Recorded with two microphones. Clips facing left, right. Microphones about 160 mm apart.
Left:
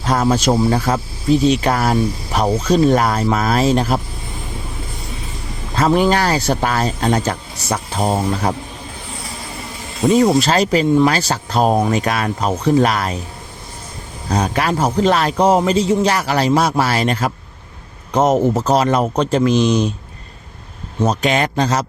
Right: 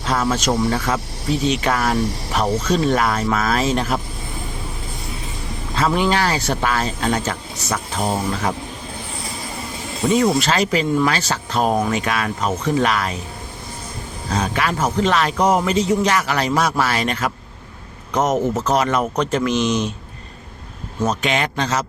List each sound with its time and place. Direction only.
0.0 s speech: 40° left (ahead or behind)
5.7 s speech: 40° left (ahead or behind)
10.2 s speech: 35° left (ahead or behind)
14.3 s speech: 35° left (ahead or behind)
21.0 s speech: 35° left (ahead or behind)